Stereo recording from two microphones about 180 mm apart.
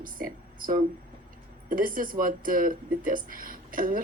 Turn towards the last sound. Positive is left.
turn(degrees=-50)  # may be behind; listen again after turning